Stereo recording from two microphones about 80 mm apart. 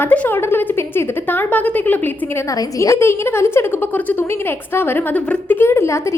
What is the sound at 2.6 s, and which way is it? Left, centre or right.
A woman's voice, left.